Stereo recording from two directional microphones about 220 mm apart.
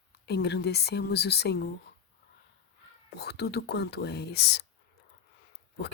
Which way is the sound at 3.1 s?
45° left (ahead or behind).